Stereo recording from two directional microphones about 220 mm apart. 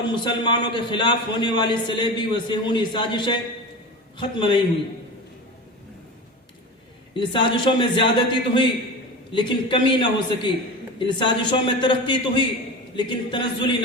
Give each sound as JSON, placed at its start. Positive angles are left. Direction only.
{"t": 0.0, "sound": "a man's voice", "side_deg": 20}
{"t": 7.5, "sound": "a man's voice", "side_deg": 20}